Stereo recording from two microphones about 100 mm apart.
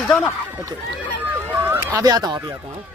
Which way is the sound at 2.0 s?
40° right (ahead or behind).